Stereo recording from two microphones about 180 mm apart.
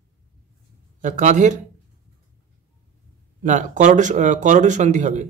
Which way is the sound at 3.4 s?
45° right (ahead or behind).